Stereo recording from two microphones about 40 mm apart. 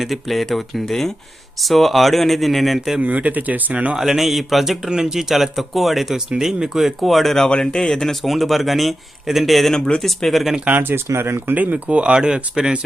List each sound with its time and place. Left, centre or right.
0.0 s speech: centre
3.0 s speech: right
3.9 s speech: centre
4.9 s speech: centre
5.3 s speech: centre
7.4 s speech: left; by 9.7 s centre
9.7 s speech: centre
10.7 s speech: right
10.9 s speech: right
11.5 s speech: right; by 12.7 s centre